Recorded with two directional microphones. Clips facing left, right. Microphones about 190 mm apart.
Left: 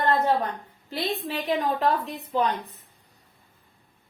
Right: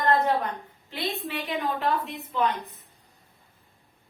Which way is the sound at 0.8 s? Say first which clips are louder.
Left 3 dB; 35° left (ahead or behind).